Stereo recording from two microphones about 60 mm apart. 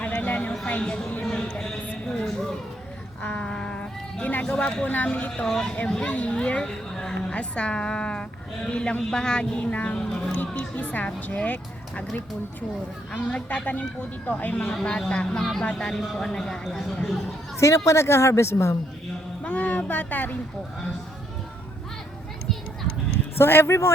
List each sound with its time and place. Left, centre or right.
0.0 s a sound: left
0.9 s a woman's voice: centre
1.3 s a sound: centre
4.4 s speech: centre
5.5 s a woman's voice: centre
6.0 s a woman's voice: left
13.1 s speech: left
14.5 s a woman's voice: centre
17.6 s a woman's voice: left
19.5 s speech: left
23.4 s a woman's voice: left